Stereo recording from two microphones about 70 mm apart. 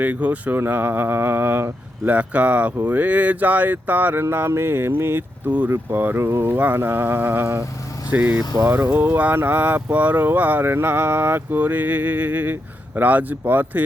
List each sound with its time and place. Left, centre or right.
0.0 s speech: right
2.1 s speech: centre
4.2 s mantra: right
5.5 s speech: right
5.7 s mantra: right
8.1 s speech: right